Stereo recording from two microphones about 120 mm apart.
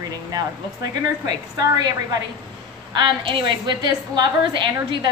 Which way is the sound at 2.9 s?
45° right (ahead or behind).